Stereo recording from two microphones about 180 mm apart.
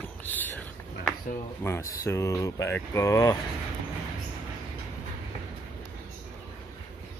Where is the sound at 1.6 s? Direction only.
15° left (ahead or behind).